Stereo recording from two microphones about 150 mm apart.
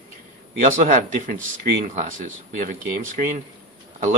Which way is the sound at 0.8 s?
60° right (ahead or behind).